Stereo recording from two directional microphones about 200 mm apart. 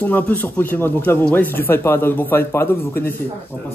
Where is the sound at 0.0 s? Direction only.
10° left (ahead or behind).